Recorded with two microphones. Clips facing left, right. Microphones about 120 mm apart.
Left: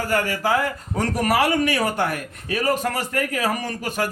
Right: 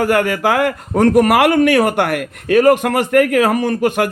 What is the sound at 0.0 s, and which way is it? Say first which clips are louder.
A man's voice: right 8 dB; 65° right (ahead or behind).